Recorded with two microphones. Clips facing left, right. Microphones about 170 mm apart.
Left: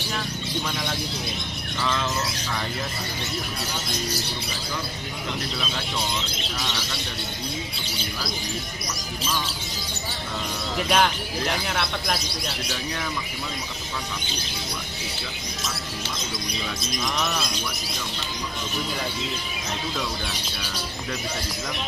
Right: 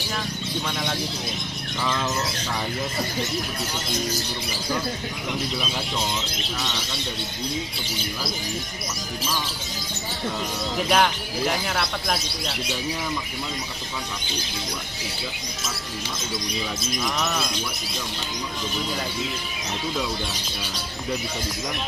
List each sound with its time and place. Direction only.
1.8 s bird: 10° right (ahead or behind)
10.8 s speech: centre (ahead or behind)
16.8 s speech: centre (ahead or behind)